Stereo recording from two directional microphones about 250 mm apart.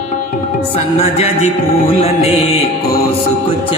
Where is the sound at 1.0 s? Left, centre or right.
Left.